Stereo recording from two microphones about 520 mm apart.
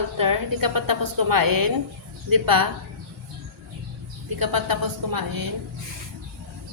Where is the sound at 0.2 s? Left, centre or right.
Right.